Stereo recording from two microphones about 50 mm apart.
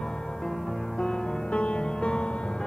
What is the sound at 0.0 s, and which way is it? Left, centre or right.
Music, centre.